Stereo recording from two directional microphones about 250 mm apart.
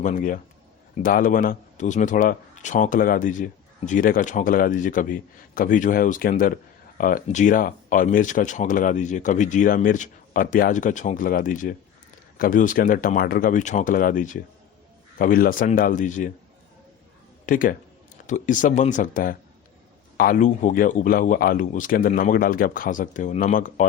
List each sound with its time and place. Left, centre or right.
0.0 s a man's voice: left
17.4 s a man's voice: left